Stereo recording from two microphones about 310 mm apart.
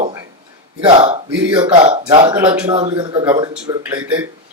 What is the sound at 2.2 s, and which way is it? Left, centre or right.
Speech, centre.